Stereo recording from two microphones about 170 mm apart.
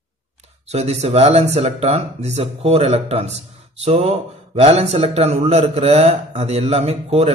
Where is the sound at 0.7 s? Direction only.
40° right (ahead or behind).